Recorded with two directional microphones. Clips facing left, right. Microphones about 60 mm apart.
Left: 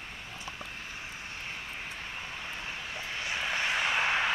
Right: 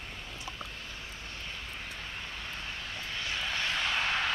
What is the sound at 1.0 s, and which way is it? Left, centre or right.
Vehicle, left.